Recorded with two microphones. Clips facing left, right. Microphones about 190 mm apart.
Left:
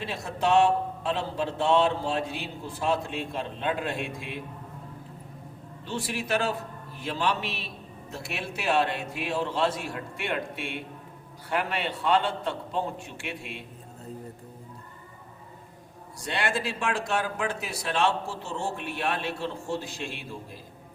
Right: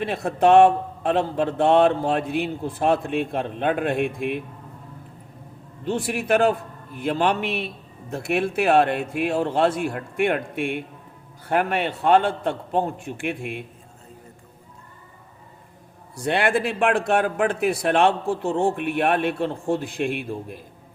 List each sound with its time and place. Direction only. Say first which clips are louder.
0.0 s speech: right 9 dB; 55° right (ahead or behind)
5.8 s a man's voice: right 7 dB; 55° right (ahead or behind)
16.1 s speech: right 8 dB; 55° right (ahead or behind)